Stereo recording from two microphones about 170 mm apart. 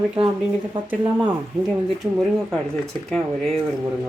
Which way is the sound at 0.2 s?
30° right (ahead or behind).